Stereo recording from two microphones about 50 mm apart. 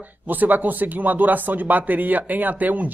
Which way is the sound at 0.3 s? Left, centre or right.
Right.